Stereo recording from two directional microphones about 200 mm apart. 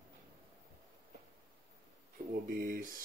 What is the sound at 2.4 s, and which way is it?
Speech, 45° right (ahead or behind).